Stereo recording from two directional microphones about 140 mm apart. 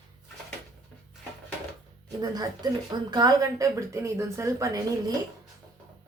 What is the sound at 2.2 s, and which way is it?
A woman's voice, 25° right (ahead or behind).